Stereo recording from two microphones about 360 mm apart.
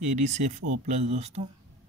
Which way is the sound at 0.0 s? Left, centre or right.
Centre.